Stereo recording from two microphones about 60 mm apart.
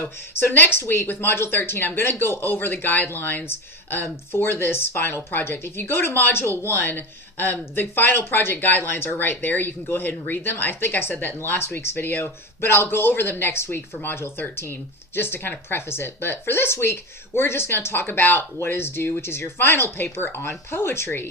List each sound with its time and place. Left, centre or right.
0.0 s speech: left